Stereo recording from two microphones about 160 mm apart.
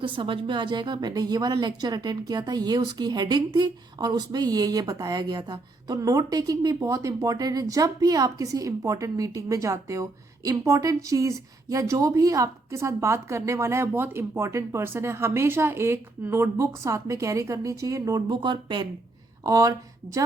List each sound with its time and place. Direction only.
0.0 s a woman's voice: 30° right (ahead or behind)